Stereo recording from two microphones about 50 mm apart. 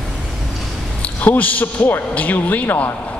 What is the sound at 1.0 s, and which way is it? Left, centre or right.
A man's voice, left.